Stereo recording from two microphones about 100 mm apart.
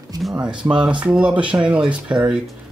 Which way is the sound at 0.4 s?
10° right (ahead or behind).